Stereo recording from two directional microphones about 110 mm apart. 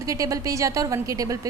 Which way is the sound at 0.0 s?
30° right (ahead or behind).